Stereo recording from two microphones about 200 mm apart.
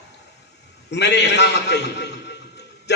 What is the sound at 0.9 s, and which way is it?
A man's voice, 60° left (ahead or behind).